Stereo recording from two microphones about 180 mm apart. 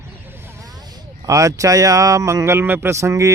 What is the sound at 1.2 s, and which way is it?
Speech, 15° right (ahead or behind).